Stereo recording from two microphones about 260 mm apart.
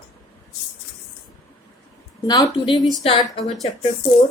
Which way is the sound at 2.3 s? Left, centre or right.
Centre.